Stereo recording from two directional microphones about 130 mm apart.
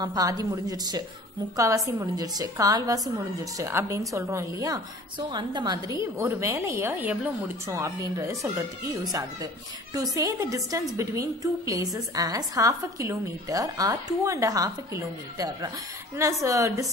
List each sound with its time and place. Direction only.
0.0 s a woman's voice: 30° right (ahead or behind)
5.9 s a woman's voice: 20° right (ahead or behind)